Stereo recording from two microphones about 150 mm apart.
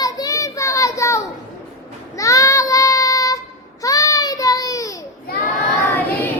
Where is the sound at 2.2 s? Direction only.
20° left (ahead or behind).